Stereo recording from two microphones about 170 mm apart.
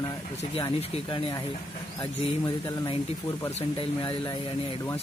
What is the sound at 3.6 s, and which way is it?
Speech, 30° left (ahead or behind).